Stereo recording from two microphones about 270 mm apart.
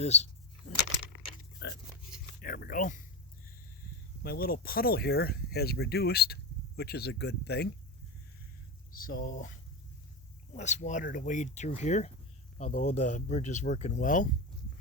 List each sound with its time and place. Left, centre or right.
0.0 s speech: left
1.5 s oink: left
2.4 s a sound: left
4.2 s speech: left
8.9 s speech: left
10.5 s speech: left